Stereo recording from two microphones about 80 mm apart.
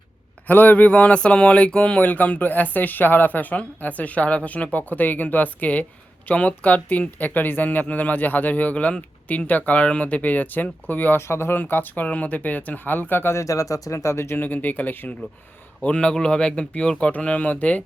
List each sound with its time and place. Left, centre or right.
0.4 s speech: left
13.4 s speech: left; by 17.8 s centre